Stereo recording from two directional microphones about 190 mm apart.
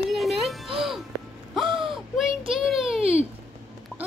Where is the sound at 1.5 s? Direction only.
Centre (ahead or behind).